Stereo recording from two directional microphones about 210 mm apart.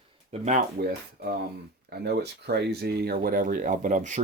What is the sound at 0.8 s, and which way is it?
Speech, 45° right (ahead or behind).